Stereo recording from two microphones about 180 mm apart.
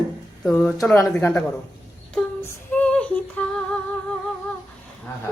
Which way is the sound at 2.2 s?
5° left (ahead or behind).